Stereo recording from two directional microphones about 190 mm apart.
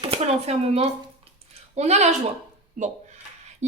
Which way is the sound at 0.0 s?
30° right (ahead or behind).